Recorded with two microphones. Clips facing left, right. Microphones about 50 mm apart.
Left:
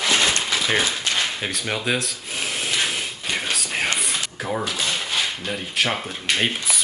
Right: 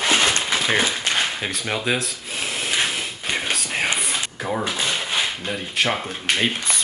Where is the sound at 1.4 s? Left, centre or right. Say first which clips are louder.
Right 1 dB; centre.